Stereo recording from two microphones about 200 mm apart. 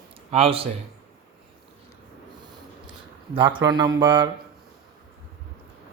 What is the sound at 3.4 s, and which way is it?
Speech, 25° right (ahead or behind).